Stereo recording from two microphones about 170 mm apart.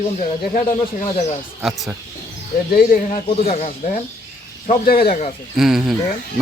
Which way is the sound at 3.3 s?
35° left (ahead or behind).